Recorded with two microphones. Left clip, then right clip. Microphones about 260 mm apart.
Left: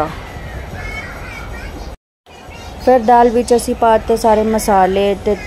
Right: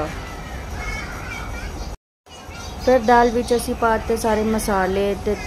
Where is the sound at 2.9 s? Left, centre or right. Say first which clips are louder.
Left 5 dB; centre.